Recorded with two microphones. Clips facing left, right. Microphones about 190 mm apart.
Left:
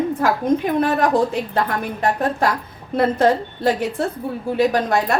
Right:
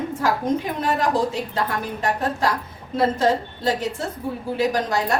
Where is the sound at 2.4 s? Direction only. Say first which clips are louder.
Left 3 dB; 60° left (ahead or behind).